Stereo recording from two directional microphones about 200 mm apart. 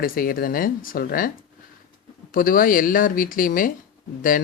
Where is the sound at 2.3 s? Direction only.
45° left (ahead or behind).